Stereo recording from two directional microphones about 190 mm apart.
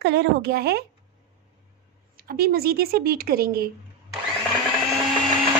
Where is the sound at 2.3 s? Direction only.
55° right (ahead or behind).